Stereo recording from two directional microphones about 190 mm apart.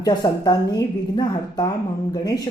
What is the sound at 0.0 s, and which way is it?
Speech, 20° left (ahead or behind).